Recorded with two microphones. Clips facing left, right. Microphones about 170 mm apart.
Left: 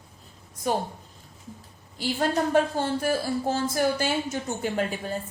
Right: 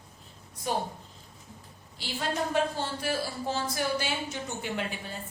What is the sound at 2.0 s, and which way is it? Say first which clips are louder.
A woman's voice: left 7 dB; 50° left (ahead or behind).